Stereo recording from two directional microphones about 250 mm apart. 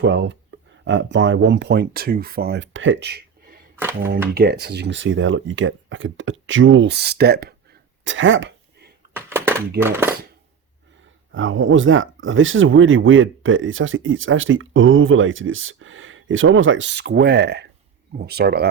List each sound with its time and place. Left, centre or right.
0.0 s speech: right
9.1 s a sound: centre
9.8 s speech: centre
11.3 s speech: right